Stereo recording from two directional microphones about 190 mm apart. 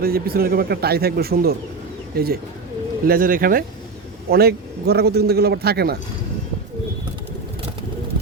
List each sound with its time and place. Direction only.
0.0 s a man's voice: 50° right (ahead or behind)